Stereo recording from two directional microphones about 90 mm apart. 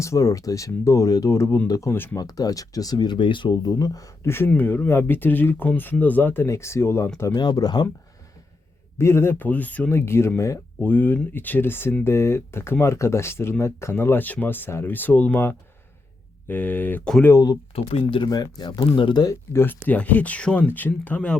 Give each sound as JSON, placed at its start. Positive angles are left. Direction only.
{"t": 0.0, "sound": "speech", "side_deg": 35}
{"t": 4.3, "sound": "speech", "side_deg": 25}
{"t": 7.3, "sound": "speech", "side_deg": 45}
{"t": 9.0, "sound": "speech", "side_deg": 30}
{"t": 10.1, "sound": "speech", "side_deg": 30}
{"t": 10.8, "sound": "speech", "side_deg": 20}
{"t": 17.3, "sound": "speech", "side_deg": 45}
{"t": 17.7, "sound": "speech", "side_deg": 90}
{"t": 18.3, "sound": "speech", "side_deg": 50}
{"t": 19.2, "sound": "speech", "side_deg": 35}
{"t": 19.6, "sound": "speech", "side_deg": 20}